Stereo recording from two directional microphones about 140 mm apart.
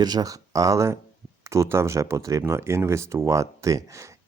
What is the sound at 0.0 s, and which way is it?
Speech, 30° right (ahead or behind).